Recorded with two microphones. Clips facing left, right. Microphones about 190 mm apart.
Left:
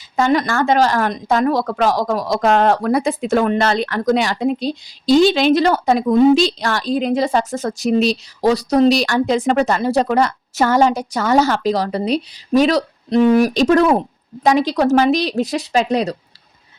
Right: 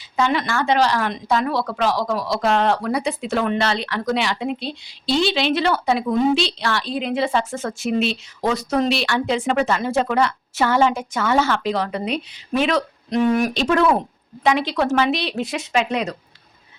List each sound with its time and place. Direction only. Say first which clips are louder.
0.2 s speech: left 5 dB; 45° left (ahead or behind)